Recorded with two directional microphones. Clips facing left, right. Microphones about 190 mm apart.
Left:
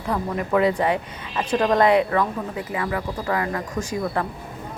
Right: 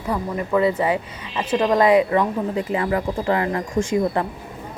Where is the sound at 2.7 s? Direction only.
30° right (ahead or behind).